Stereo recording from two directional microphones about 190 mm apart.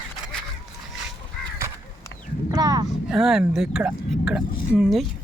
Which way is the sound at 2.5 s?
20° right (ahead or behind).